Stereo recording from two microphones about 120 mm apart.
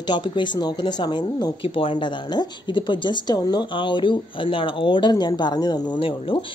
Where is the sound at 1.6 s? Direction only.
50° left (ahead or behind).